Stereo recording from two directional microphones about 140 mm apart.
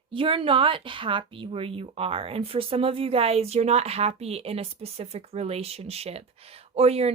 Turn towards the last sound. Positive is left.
turn(degrees=-45)  # may be behind; listen again after turning